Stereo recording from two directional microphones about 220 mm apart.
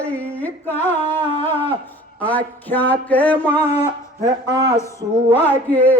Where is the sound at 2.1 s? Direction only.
5° left (ahead or behind).